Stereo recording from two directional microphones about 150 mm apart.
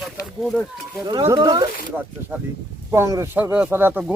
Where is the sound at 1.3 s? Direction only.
30° right (ahead or behind).